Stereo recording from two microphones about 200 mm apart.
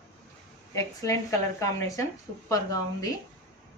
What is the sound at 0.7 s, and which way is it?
A woman's voice, 15° left (ahead or behind).